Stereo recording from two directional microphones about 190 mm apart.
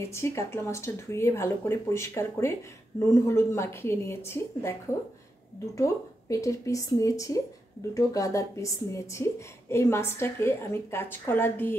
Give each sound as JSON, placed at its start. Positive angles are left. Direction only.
{"t": 0.0, "sound": "speech", "side_deg": 15}